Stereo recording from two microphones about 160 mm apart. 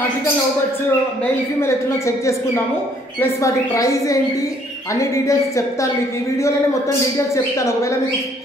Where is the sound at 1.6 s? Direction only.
15° left (ahead or behind).